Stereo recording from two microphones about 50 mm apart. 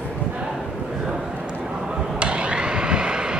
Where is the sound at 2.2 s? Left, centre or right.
Right.